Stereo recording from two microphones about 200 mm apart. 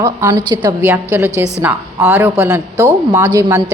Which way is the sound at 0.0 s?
15° right (ahead or behind).